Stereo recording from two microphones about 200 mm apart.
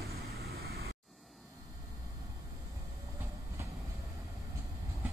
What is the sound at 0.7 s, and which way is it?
Vehicle, 50° right (ahead or behind).